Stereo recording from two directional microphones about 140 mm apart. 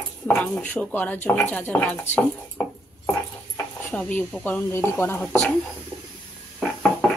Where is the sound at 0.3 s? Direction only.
10° left (ahead or behind).